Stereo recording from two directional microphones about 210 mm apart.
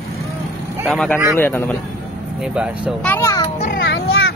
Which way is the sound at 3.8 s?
60° left (ahead or behind).